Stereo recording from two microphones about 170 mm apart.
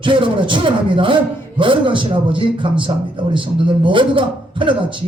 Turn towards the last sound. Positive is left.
turn(degrees=-30)  # may be behind; listen again after turning